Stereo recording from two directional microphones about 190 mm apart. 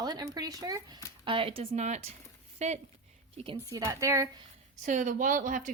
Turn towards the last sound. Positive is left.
turn(degrees=-45)  # may be behind; listen again after turning